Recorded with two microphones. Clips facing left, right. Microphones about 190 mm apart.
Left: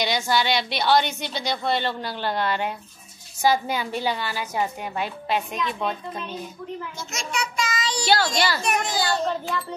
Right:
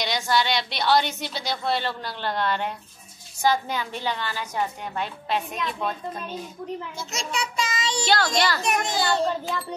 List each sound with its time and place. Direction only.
0.0 s a woman's voice: centre (ahead or behind)
7.1 s child singing: 30° right (ahead or behind)
8.0 s a woman's voice: 5° left (ahead or behind)
8.6 s a child's voice: 25° right (ahead or behind)